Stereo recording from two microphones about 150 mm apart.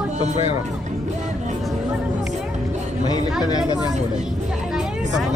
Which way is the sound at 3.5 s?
25° left (ahead or behind).